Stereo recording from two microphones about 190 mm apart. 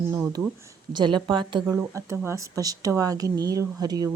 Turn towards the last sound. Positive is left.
turn(degrees=-20)  # may be behind; listen again after turning